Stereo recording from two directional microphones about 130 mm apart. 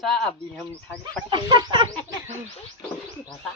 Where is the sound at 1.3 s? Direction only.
35° right (ahead or behind).